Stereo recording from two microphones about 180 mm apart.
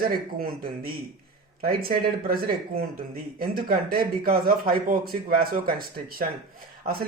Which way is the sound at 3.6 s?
55° right (ahead or behind).